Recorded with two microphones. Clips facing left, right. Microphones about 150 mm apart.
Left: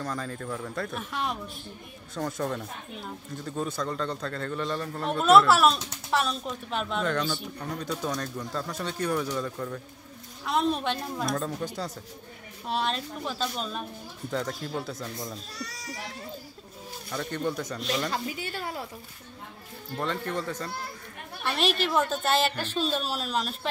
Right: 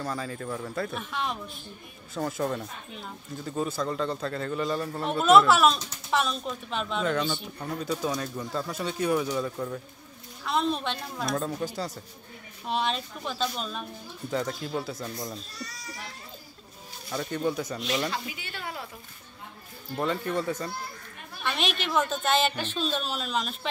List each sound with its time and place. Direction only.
0.0 s a man's voice: 5° right (ahead or behind)
10.4 s a woman's voice: 10° left (ahead or behind)
11.3 s a man's voice: 5° right (ahead or behind)
15.5 s a child's voice: 75° left (ahead or behind)
17.1 s speech: 5° right (ahead or behind)
18.1 s a woman's voice: 40° left (ahead or behind)
20.0 s speech: 10° right (ahead or behind)
21.5 s a woman's voice: 40° left (ahead or behind)
21.9 s a man's voice: 5° left (ahead or behind)
22.6 s a woman's voice: 40° left (ahead or behind)
23.1 s a man's voice: 5° left (ahead or behind)